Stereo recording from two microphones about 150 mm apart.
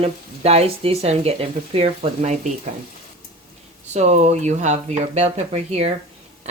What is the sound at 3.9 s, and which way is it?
Speech, 50° right (ahead or behind).